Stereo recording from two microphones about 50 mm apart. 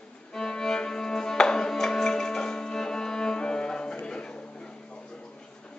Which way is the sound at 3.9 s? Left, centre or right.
Centre.